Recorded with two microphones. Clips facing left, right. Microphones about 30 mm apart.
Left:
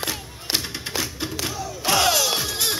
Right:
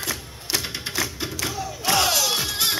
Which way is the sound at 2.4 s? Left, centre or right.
Centre.